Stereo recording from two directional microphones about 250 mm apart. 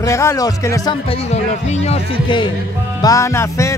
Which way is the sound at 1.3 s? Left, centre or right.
Left.